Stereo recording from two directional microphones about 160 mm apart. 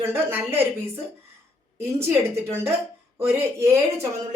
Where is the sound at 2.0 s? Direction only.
15° right (ahead or behind).